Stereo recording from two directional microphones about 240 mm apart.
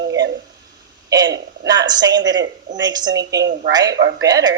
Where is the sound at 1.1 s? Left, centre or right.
Centre.